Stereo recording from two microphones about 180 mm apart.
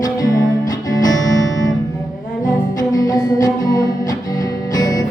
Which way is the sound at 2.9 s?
20° left (ahead or behind).